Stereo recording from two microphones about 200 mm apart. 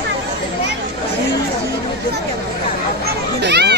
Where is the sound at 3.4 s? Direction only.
60° right (ahead or behind).